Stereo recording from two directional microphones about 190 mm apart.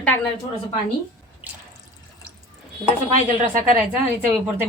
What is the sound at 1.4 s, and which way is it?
Water, 10° right (ahead or behind).